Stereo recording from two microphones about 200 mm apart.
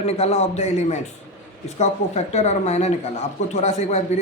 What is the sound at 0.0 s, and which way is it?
A man's voice, 30° left (ahead or behind).